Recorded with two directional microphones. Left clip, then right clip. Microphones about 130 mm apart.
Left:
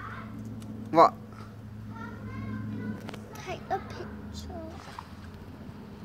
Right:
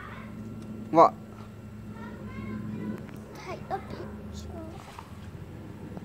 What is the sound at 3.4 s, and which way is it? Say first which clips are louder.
Children playing: left 2 dB; 30° left (ahead or behind).